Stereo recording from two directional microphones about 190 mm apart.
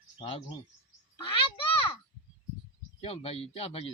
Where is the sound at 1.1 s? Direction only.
30° left (ahead or behind).